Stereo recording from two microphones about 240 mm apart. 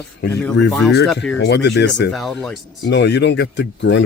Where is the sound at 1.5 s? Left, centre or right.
Left.